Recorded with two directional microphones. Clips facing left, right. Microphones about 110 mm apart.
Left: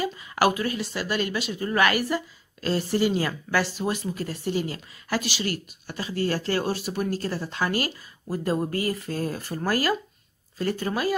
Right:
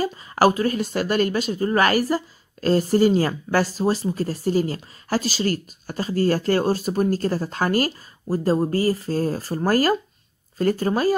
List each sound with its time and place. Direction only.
0.0 s speech: 40° right (ahead or behind)